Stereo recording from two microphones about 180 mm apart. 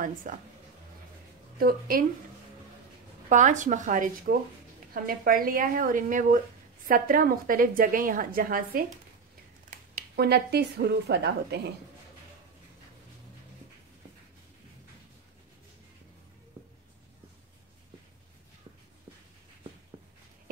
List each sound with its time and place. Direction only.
0.0 s a woman's voice: 45° right (ahead or behind)
1.6 s a woman's voice: 55° right (ahead or behind)
3.3 s a woman's voice: 45° right (ahead or behind); by 11.7 s 65° right (ahead or behind)